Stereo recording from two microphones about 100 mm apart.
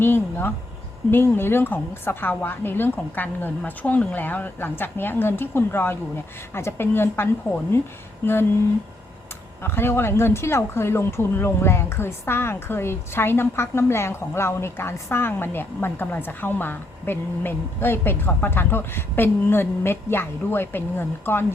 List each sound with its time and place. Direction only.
0.0 s speech: 20° left (ahead or behind)
9.6 s speech: 25° left (ahead or behind)